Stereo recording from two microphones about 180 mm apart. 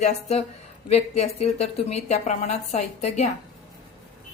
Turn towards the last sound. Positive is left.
turn(degrees=40)  # may be behind; listen again after turning